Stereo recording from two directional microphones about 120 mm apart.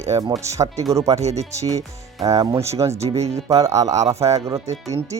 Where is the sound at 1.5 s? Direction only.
30° right (ahead or behind).